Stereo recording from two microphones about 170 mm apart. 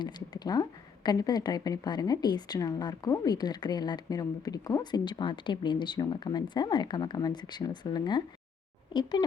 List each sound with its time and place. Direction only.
0.0 s a woman's voice: 25° left (ahead or behind)